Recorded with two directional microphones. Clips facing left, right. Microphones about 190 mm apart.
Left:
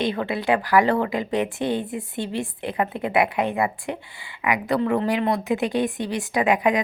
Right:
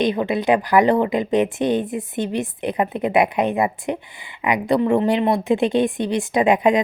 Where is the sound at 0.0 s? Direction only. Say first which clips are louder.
Right 5 dB; 20° right (ahead or behind).